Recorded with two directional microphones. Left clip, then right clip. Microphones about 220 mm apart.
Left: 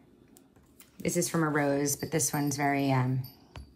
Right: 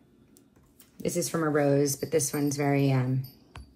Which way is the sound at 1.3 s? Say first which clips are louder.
Right 4 dB; 30° left (ahead or behind).